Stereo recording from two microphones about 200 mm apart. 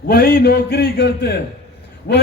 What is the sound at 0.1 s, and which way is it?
A man's voice, 50° left (ahead or behind).